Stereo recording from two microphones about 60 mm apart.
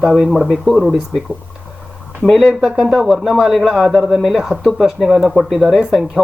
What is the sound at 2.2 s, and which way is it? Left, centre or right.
Speech, centre.